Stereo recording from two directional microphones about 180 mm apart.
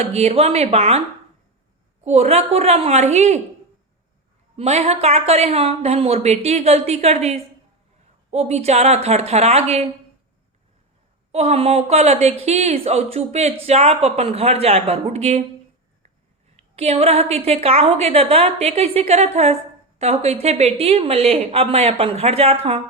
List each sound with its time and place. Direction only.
0.0 s a woman's voice: 35° right (ahead or behind)
2.0 s a woman's voice: 35° right (ahead or behind)
4.5 s a woman's voice: 35° right (ahead or behind)
11.3 s a woman's voice: 35° right (ahead or behind)
16.6 s a woman's voice: 35° right (ahead or behind)